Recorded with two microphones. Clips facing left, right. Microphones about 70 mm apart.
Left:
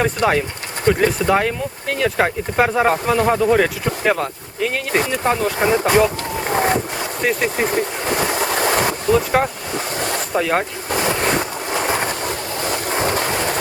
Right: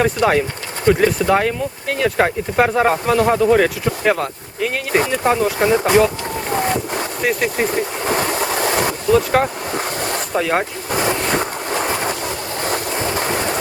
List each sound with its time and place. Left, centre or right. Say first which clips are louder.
0.0 s speech: right 2 dB; centre
6.5 s boat: left 2 dB; centre
7.2 s speech: even; centre
8.4 s a sound: left 1 dB; centre
9.0 s speech: right 2 dB; centre
10.0 s a sound: left 2 dB; centre